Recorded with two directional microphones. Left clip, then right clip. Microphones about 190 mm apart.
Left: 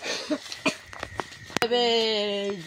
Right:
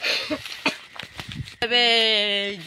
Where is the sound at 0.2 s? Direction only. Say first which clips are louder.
Right 2 dB; 20° left (ahead or behind).